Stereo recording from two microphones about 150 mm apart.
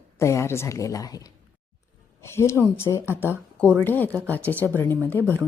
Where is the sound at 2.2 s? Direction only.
20° left (ahead or behind).